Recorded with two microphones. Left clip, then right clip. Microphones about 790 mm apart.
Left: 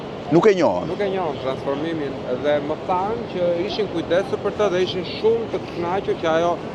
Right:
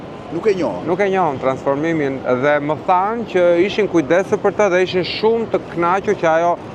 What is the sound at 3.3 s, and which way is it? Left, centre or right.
Speech, right.